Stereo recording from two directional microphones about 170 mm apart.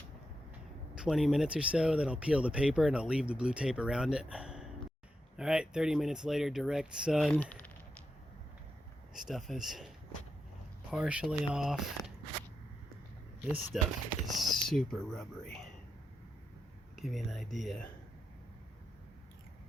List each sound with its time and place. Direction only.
0.9 s speech: centre (ahead or behind)
9.1 s speech: centre (ahead or behind)
10.9 s speech: 5° right (ahead or behind)
13.7 s speech: centre (ahead or behind)
17.0 s speech: centre (ahead or behind)